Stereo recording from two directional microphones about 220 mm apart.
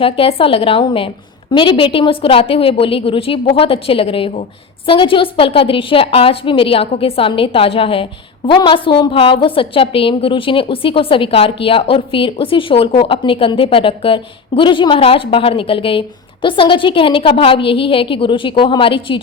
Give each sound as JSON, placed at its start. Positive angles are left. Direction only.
{"t": 0.0, "sound": "a woman's voice", "side_deg": 25}